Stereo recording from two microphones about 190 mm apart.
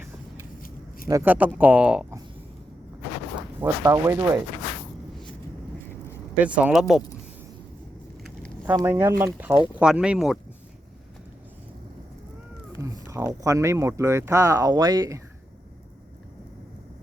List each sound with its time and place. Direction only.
1.0 s speech: 15° right (ahead or behind)
3.6 s speech: 15° right (ahead or behind)
6.3 s speech: 5° right (ahead or behind)
8.2 s a sound: 5° left (ahead or behind)
8.6 s speech: 15° right (ahead or behind)
12.8 s speech: 15° right (ahead or behind)